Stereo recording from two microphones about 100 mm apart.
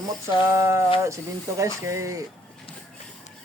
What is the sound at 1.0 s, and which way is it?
Speech, 30° right (ahead or behind).